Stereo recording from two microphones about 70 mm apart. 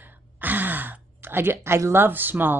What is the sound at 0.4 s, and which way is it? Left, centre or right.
Sigh, right.